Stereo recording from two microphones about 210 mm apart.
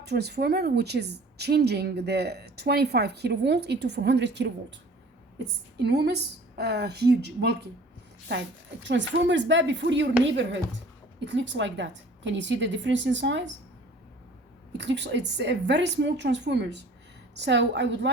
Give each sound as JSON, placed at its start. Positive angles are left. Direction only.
{"t": 0.0, "sound": "a woman's voice", "side_deg": -50}
{"t": 5.8, "sound": "a woman's voice", "side_deg": -50}
{"t": 8.8, "sound": "a woman's voice", "side_deg": -60}
{"t": 14.8, "sound": "a woman's voice", "side_deg": -55}